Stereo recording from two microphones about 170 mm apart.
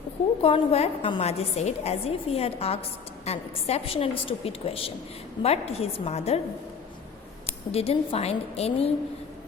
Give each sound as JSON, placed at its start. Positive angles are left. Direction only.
{"t": 0.4, "sound": "a woman's voice", "side_deg": 35}
{"t": 7.4, "sound": "a woman's voice", "side_deg": 35}